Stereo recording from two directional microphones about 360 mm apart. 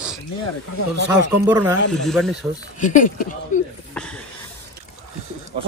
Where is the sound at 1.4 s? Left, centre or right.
Centre.